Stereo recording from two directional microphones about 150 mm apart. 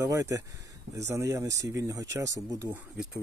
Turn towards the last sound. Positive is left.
turn(degrees=-5)  # may be behind; listen again after turning